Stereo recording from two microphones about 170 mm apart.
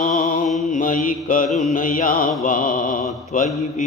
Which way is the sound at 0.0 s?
50° left (ahead or behind).